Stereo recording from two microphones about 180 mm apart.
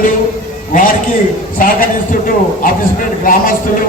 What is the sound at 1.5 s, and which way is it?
A man's voice, 50° left (ahead or behind).